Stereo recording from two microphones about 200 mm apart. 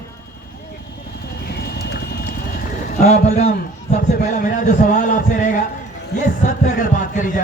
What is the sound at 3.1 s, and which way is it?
Speech, 35° left (ahead or behind).